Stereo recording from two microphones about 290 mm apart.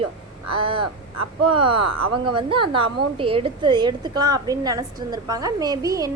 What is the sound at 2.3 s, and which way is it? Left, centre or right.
A woman's voice, centre.